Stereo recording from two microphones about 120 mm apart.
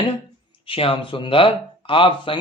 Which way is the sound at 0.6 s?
50° left (ahead or behind).